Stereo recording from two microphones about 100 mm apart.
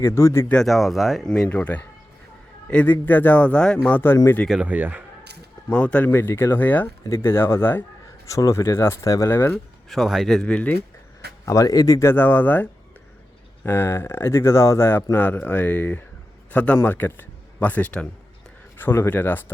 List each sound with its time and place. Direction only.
0.0 s speech: 25° left (ahead or behind)
0.4 s speech: 5° left (ahead or behind)
1.3 s speech: 10° left (ahead or behind)
4.4 s speech: 10° right (ahead or behind)
5.6 s speech: 15° left (ahead or behind)
8.3 s speech: 30° left (ahead or behind)
9.9 s speech: centre (ahead or behind)
11.4 s speech: 35° left (ahead or behind)
12.0 s speech: 20° left (ahead or behind)
13.7 s a man's voice: 25° left (ahead or behind)